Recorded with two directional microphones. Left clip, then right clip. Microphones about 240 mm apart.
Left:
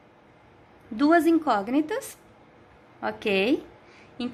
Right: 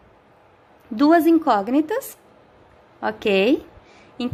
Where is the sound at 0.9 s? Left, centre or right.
Centre.